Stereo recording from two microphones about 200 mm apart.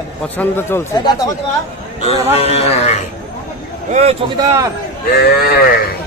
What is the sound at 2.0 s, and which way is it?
Speech, 30° left (ahead or behind).